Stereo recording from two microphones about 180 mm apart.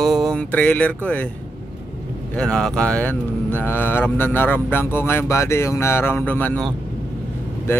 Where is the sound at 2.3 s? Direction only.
5° left (ahead or behind).